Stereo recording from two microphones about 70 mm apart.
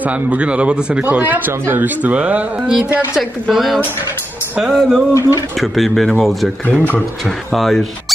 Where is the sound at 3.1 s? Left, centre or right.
Centre.